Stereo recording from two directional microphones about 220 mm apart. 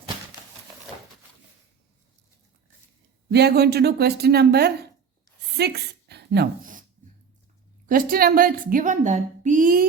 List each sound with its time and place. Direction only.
3.2 s speech: 45° right (ahead or behind)
5.5 s a sound: 45° right (ahead or behind)
7.9 s a woman's voice: 40° right (ahead or behind)